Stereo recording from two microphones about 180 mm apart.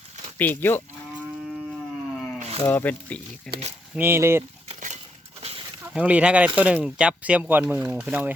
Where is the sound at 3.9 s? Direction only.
10° right (ahead or behind).